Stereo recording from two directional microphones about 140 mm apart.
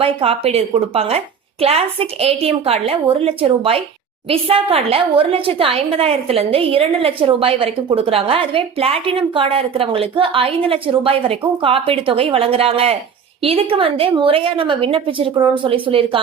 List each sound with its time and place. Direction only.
0.0 s a woman's voice: 45° right (ahead or behind)